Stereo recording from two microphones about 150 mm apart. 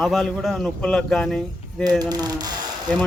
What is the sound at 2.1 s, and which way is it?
Speech, 25° right (ahead or behind).